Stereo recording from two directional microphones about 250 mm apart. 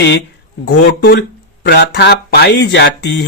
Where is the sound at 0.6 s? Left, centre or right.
Left.